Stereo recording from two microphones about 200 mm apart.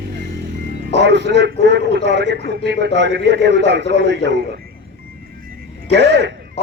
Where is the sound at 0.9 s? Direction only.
60° right (ahead or behind).